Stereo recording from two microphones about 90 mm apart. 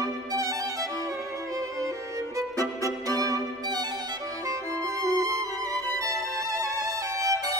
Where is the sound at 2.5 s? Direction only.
35° left (ahead or behind).